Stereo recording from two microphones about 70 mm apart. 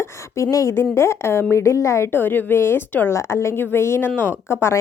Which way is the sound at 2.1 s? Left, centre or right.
Left.